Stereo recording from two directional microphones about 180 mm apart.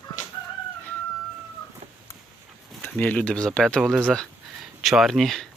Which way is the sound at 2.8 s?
10° left (ahead or behind).